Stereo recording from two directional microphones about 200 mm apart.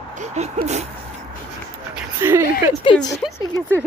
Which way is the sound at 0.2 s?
35° right (ahead or behind).